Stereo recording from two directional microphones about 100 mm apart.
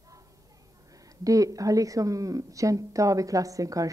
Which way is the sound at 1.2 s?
35° right (ahead or behind).